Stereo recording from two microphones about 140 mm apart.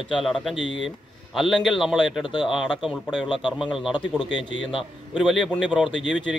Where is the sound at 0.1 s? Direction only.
Centre (ahead or behind).